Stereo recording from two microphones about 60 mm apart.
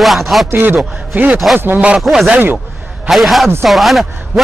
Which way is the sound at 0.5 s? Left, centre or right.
Right.